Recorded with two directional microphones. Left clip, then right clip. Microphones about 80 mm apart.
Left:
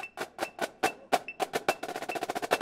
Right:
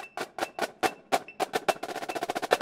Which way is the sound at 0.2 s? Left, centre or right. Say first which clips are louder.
Right 3 dB; centre.